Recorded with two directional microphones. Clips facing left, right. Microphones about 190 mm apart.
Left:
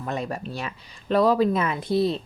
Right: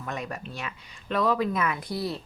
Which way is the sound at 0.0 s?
30° left (ahead or behind).